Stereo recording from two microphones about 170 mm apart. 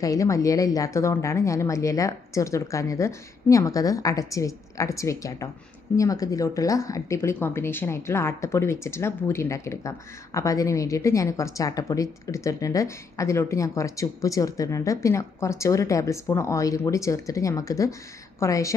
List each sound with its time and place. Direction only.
0.0 s a woman's voice: 20° left (ahead or behind)